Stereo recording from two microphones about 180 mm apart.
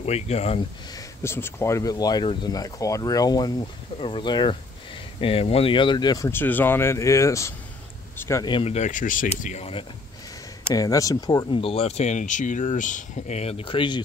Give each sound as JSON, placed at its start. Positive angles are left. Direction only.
{"t": 0.0, "sound": "speech", "side_deg": 35}
{"t": 0.9, "sound": "speech", "side_deg": 15}
{"t": 8.5, "sound": "speech", "side_deg": 30}
{"t": 10.7, "sound": "speech", "side_deg": 20}